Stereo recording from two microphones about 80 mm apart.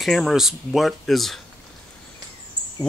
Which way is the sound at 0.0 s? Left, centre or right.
Centre.